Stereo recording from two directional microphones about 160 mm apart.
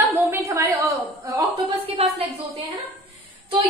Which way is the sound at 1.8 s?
40° right (ahead or behind).